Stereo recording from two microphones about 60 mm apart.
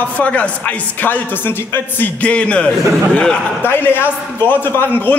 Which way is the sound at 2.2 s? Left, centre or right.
Centre.